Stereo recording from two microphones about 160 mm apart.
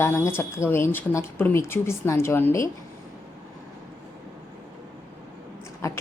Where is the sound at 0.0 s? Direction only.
15° left (ahead or behind).